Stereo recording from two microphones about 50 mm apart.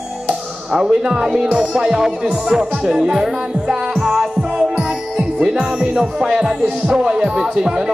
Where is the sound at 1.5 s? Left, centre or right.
Centre.